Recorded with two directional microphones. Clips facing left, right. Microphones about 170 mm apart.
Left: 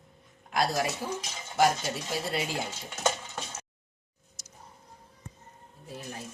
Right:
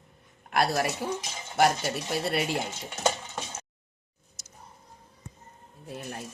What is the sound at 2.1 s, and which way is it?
Speech, 65° right (ahead or behind).